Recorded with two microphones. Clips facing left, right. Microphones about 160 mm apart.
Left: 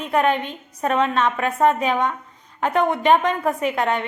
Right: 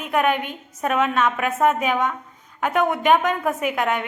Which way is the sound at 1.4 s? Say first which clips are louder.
Left 1 dB; 5° right (ahead or behind).